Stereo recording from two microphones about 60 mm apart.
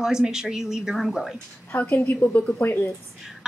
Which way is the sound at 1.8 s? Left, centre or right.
Left.